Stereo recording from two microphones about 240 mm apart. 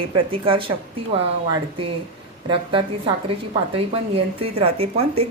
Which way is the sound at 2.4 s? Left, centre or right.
Right.